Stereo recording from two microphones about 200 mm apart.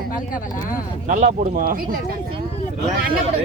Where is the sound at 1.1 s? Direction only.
40° right (ahead or behind).